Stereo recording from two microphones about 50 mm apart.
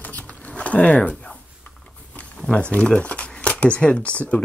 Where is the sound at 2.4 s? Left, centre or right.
Centre.